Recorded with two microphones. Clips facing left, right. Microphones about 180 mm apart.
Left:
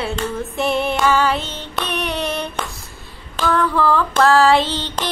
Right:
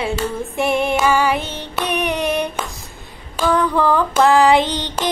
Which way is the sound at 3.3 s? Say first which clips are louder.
Right 1 dB; 15° right (ahead or behind).